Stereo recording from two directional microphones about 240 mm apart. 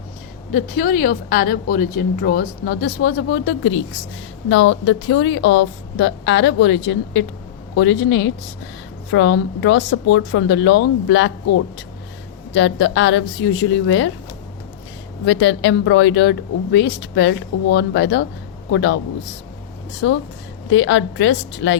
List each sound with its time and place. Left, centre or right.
0.5 s a woman's voice: left
15.3 s a woman's voice: left
20.7 s a woman's voice: left